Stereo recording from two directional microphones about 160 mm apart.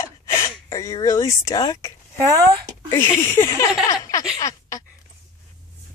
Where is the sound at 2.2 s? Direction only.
25° right (ahead or behind).